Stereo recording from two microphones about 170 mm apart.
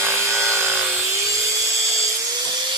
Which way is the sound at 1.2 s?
20° right (ahead or behind).